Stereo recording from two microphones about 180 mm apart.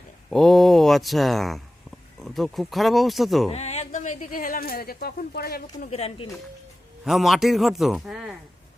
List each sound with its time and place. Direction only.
0.3 s a man's voice: centre (ahead or behind)
3.5 s speech: 35° left (ahead or behind); by 5.9 s 55° left (ahead or behind)
5.9 s speech: 30° left (ahead or behind)
7.0 s a man's voice: centre (ahead or behind)